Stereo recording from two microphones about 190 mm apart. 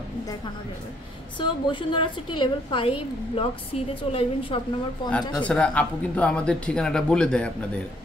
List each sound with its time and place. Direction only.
1.4 s a woman's voice: 25° left (ahead or behind)
5.3 s speech: 5° left (ahead or behind)